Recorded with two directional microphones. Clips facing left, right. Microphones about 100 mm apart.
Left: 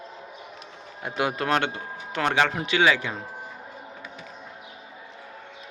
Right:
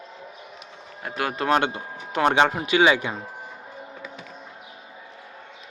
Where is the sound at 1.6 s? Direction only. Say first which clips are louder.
Right 3 dB; 15° right (ahead or behind).